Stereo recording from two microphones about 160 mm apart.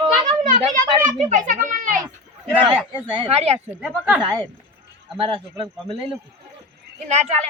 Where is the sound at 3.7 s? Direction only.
5° right (ahead or behind).